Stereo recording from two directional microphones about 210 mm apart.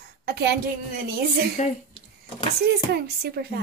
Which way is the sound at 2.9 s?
50° right (ahead or behind).